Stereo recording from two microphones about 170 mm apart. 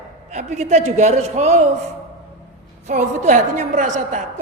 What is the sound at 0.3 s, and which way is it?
A man's voice, 40° right (ahead or behind).